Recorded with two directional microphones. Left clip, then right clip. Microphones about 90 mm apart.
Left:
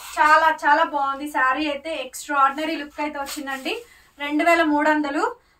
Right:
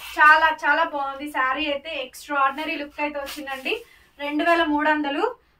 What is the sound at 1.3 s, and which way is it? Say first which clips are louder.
Speech: left 1 dB; 25° left (ahead or behind).